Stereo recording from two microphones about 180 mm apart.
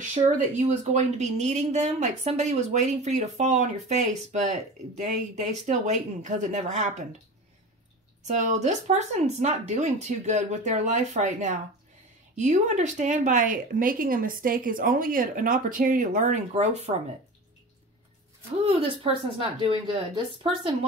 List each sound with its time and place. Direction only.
0.1 s speech: 40° right (ahead or behind)
8.3 s speech: 40° right (ahead or behind)
18.6 s speech: 30° right (ahead or behind)